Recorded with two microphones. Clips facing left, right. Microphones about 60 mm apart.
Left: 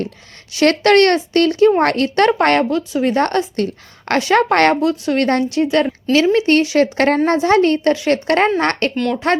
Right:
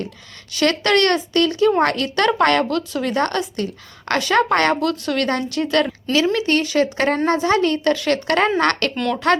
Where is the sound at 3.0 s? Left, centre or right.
Left.